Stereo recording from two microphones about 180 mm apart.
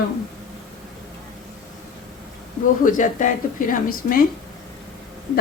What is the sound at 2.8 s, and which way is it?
A woman's voice, 45° left (ahead or behind).